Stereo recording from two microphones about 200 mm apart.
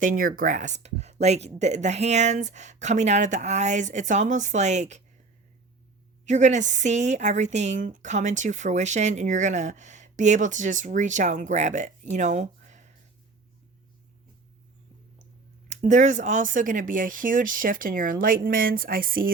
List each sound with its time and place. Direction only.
0.0 s a woman's voice: 40° right (ahead or behind)
6.2 s a woman's voice: 35° right (ahead or behind)
12.1 s a sound: 35° right (ahead or behind)
15.7 s speech: 35° right (ahead or behind)